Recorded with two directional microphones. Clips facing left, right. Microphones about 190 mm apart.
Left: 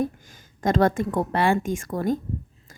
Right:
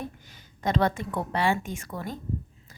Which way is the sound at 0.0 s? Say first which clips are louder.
Left 11 dB; 45° left (ahead or behind).